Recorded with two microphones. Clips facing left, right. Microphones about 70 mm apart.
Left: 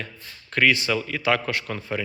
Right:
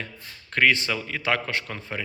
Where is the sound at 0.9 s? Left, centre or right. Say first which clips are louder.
Left 4 dB; centre.